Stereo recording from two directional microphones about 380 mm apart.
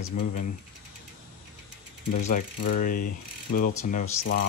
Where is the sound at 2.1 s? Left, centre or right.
Left.